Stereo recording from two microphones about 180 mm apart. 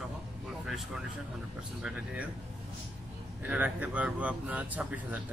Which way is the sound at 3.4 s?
10° right (ahead or behind).